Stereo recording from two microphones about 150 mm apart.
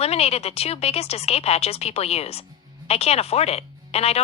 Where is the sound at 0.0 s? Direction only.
45° left (ahead or behind).